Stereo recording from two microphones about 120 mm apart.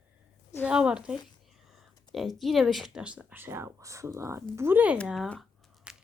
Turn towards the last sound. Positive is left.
turn(degrees=-5)  # may be behind; listen again after turning